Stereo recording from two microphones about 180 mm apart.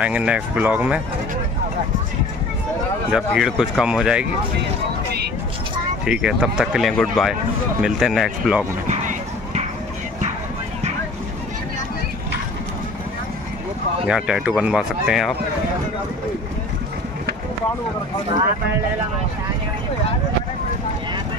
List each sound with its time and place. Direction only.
0.0 s speech: 5° right (ahead or behind)
3.1 s speech: centre (ahead or behind)
6.0 s speech: 5° right (ahead or behind)
8.8 s clip-clop: 40° right (ahead or behind)
14.0 s speech: 5° right (ahead or behind)